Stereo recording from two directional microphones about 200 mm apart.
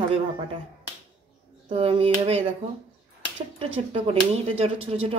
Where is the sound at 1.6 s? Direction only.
30° right (ahead or behind).